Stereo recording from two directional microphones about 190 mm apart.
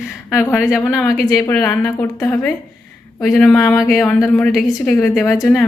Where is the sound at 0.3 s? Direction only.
15° left (ahead or behind).